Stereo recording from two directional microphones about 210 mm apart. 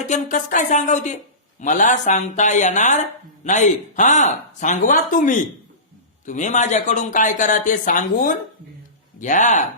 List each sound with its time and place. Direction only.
0.0 s speech: 35° left (ahead or behind)